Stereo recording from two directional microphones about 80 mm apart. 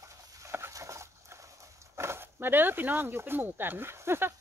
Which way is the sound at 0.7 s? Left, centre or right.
Right.